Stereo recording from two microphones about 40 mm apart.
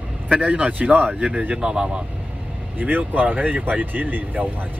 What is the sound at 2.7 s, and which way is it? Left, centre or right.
Speech, right.